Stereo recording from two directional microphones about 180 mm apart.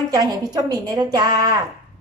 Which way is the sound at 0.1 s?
20° right (ahead or behind).